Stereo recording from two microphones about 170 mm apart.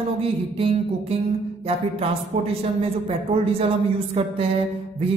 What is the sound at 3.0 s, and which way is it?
Speech, 35° right (ahead or behind).